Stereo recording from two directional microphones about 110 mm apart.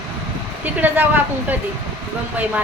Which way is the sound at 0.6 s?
15° right (ahead or behind).